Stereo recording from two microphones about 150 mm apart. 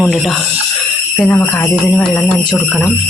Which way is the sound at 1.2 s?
15° left (ahead or behind).